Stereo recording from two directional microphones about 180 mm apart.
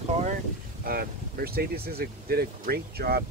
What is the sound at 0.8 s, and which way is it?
Speech, 55° right (ahead or behind).